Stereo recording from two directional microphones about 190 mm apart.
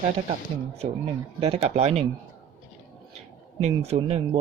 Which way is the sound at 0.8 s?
30° right (ahead or behind).